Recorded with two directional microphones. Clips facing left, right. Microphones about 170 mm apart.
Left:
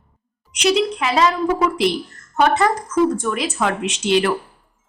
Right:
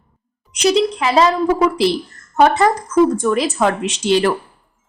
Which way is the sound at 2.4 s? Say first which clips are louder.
Right 3 dB; 35° right (ahead or behind).